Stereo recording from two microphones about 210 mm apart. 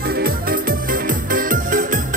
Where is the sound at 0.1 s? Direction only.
45° right (ahead or behind).